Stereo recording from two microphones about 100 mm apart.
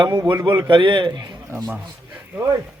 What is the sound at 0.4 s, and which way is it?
Speech, 50° right (ahead or behind).